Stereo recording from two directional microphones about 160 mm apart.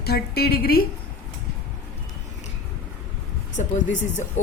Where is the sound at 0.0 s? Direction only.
80° left.